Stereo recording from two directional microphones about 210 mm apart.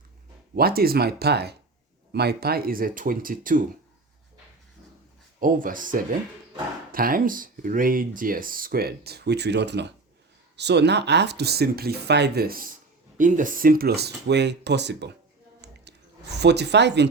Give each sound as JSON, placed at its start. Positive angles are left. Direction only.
{"t": 0.5, "sound": "speech", "side_deg": -45}
{"t": 5.4, "sound": "speech", "side_deg": -40}
{"t": 15.6, "sound": "a sound", "side_deg": -55}
{"t": 16.4, "sound": "speech", "side_deg": -55}